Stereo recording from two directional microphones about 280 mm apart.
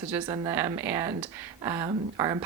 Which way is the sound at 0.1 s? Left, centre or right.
Centre.